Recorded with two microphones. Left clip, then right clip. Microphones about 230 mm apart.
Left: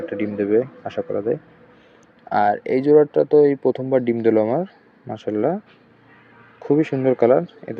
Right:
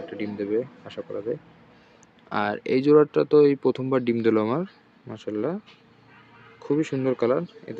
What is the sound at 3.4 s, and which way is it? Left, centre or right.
Speech, right.